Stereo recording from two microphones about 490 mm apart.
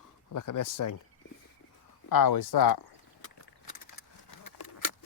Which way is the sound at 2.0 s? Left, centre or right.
Left.